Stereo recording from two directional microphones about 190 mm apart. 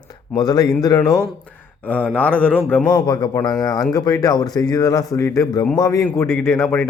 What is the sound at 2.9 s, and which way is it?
A man's voice, 20° left (ahead or behind).